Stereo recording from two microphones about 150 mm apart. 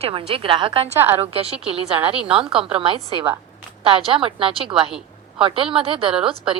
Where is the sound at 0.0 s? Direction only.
35° right (ahead or behind).